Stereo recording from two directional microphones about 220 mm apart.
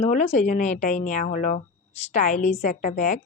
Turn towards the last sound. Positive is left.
turn(degrees=35)  # may be behind; listen again after turning